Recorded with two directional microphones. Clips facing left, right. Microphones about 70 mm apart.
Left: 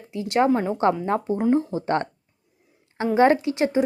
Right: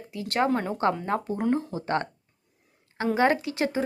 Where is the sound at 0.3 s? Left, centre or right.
Centre.